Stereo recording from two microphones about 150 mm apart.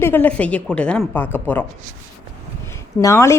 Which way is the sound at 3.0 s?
20° left (ahead or behind).